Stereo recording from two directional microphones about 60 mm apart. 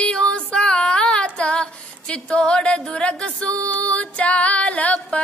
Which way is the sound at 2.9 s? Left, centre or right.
Centre.